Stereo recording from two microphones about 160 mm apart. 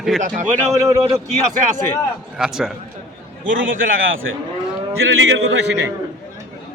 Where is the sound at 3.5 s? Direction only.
60° right (ahead or behind).